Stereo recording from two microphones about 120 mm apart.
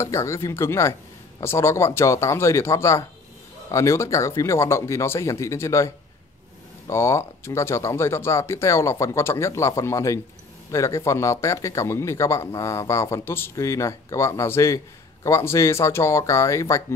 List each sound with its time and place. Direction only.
0.0 s speech: 25° left (ahead or behind)